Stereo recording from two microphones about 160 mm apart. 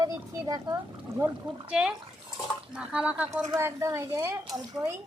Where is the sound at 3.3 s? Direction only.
20° right (ahead or behind).